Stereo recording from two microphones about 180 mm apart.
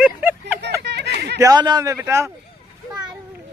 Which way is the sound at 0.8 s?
70° right (ahead or behind).